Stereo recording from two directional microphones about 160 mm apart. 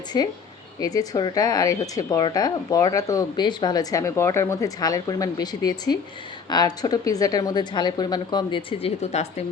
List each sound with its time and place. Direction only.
0.1 s speech: 25° left (ahead or behind)
9.0 s a woman's voice: 45° left (ahead or behind)